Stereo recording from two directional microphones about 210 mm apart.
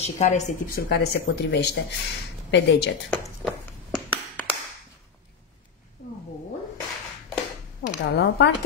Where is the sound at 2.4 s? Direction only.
55° left (ahead or behind).